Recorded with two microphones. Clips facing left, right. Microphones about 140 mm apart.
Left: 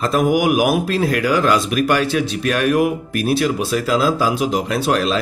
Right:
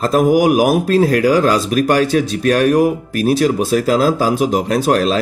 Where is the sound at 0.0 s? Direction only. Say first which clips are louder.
Right 4 dB; 40° right (ahead or behind).